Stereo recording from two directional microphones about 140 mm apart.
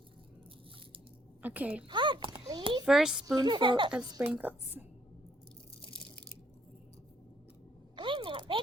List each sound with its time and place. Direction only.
1.4 s a woman's voice: 10° right (ahead or behind)
1.9 s a child's voice: 35° right (ahead or behind)
2.8 s a woman's voice: 5° right (ahead or behind)
3.2 s a woman's voice: 30° right (ahead or behind)
4.3 s a woman's voice: 15° right (ahead or behind)
7.9 s a sound: 35° right (ahead or behind)